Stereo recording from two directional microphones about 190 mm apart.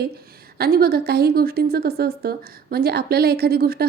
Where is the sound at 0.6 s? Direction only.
55° right (ahead or behind).